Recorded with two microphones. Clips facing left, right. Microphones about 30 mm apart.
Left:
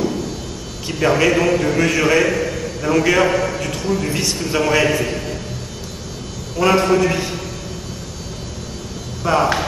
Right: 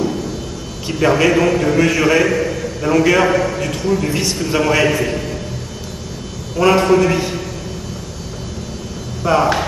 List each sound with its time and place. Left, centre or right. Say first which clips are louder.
0.8 s a man's voice: right 2 dB; centre
6.6 s a man's voice: right 2 dB; centre
9.2 s a man's voice: right 2 dB; centre